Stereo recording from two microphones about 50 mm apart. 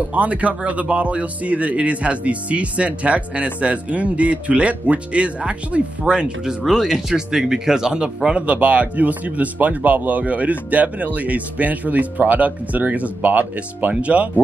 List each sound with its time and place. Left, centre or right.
0.1 s speech: right
6.6 s speech: centre; by 14.4 s right